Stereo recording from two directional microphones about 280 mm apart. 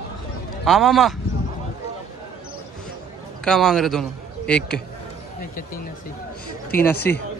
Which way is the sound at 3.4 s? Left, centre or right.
Centre.